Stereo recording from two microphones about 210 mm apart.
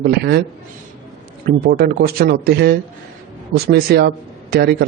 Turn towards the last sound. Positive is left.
turn(degrees=-50)  # may be behind; listen again after turning